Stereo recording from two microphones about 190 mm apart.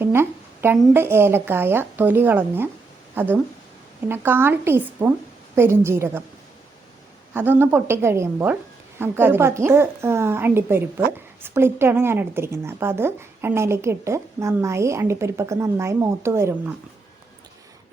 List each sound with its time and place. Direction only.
0.0 s a woman's voice: 10° right (ahead or behind)
7.3 s a woman's voice: 10° right (ahead or behind)